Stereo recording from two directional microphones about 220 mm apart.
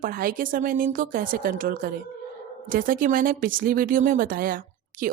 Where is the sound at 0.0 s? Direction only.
40° right (ahead or behind).